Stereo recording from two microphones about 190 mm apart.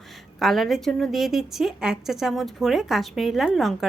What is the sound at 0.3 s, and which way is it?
A woman's voice, centre (ahead or behind).